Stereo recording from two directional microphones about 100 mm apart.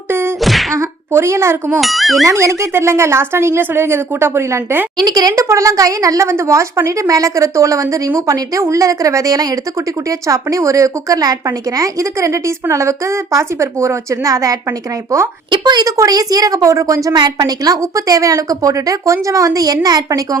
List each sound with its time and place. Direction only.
0.1 s a sound: 25° right (ahead or behind)
0.4 s whack: centre (ahead or behind)
0.8 s speech: 30° right (ahead or behind)
1.8 s speech: centre (ahead or behind)
2.2 s speech: 30° right (ahead or behind)
4.9 s a woman's voice: 40° right (ahead or behind)
15.4 s a woman's voice: 50° right (ahead or behind)